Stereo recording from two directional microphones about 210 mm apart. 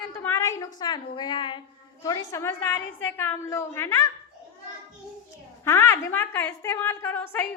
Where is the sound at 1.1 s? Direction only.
20° left (ahead or behind).